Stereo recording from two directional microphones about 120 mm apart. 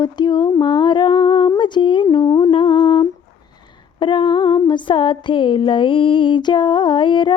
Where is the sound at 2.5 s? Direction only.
40° left (ahead or behind).